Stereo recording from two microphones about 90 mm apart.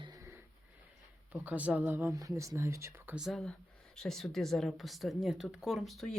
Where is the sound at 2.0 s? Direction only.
35° right (ahead or behind).